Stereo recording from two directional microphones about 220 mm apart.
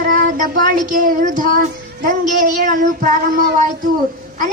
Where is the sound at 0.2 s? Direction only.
40° right (ahead or behind).